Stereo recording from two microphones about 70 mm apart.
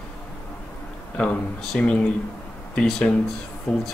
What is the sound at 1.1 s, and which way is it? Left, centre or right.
A man's voice, centre.